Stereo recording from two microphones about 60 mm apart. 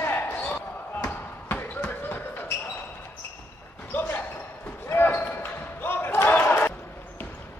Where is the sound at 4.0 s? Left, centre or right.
Left.